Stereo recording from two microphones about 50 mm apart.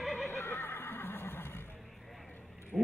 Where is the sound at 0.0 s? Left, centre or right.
Centre.